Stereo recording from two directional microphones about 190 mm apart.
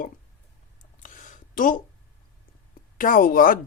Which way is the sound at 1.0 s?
40° left (ahead or behind).